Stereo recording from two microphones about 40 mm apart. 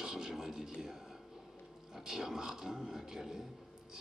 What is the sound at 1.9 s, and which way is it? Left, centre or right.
Speech, centre.